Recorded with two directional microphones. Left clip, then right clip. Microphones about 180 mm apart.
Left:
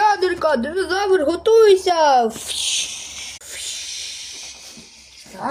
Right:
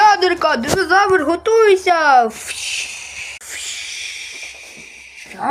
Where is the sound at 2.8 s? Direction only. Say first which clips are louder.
Right 1 dB; 50° left (ahead or behind).